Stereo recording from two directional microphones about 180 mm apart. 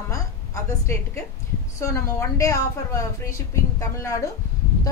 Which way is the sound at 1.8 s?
15° left (ahead or behind).